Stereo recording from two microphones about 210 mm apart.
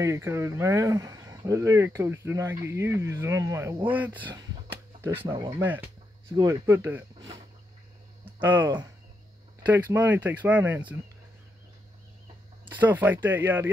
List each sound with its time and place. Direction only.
0.0 s speech: 15° right (ahead or behind)
5.3 s speech: 25° right (ahead or behind)
5.6 s speech: 10° right (ahead or behind)
8.4 s speech: 10° right (ahead or behind)
12.7 s speech: 10° right (ahead or behind)